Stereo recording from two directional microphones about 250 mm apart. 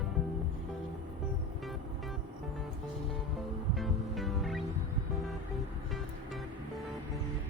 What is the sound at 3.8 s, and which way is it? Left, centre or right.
Music, centre.